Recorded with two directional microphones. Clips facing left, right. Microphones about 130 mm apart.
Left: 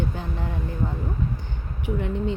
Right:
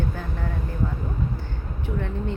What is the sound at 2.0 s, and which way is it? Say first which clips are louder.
Speech: left 3 dB; 15° left (ahead or behind).